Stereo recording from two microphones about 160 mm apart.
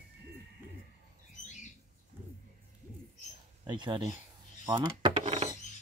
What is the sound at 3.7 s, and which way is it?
Speech, 30° right (ahead or behind).